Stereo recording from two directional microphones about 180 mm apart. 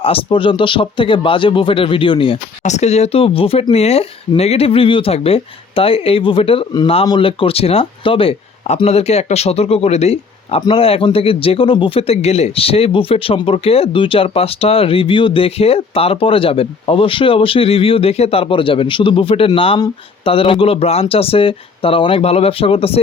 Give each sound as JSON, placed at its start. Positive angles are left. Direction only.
{"t": 0.0, "sound": "speech", "side_deg": 30}